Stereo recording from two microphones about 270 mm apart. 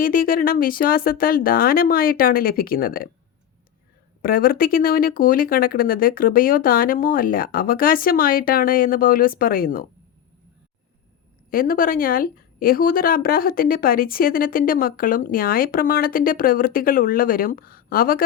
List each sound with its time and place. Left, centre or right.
0.0 s a woman's voice: left
4.2 s a woman's voice: left
11.5 s a woman's voice: left